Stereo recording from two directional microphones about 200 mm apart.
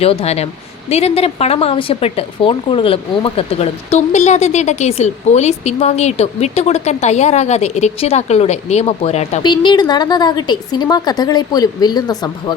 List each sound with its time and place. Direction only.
0.0 s speech: 30° left (ahead or behind)